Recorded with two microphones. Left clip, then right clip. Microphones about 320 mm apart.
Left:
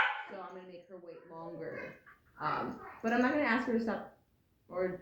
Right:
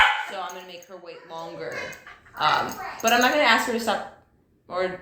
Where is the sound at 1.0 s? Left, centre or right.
Right.